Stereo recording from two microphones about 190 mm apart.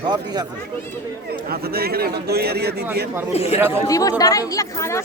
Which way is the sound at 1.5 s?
55° right (ahead or behind).